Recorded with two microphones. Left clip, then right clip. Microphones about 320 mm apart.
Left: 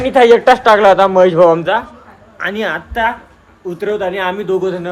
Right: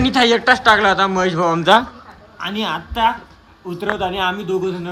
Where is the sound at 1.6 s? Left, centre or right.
Right.